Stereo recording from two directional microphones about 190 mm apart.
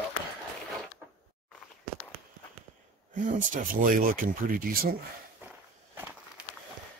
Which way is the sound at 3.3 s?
45° right (ahead or behind).